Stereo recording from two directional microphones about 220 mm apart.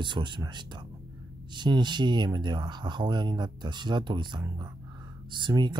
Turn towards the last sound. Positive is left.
turn(degrees=-20)  # may be behind; listen again after turning